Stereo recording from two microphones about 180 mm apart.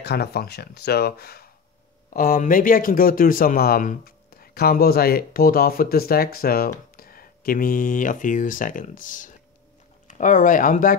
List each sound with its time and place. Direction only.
0.0 s speech: 60° left (ahead or behind)